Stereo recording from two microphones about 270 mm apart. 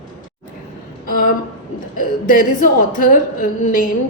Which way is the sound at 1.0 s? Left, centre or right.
Left.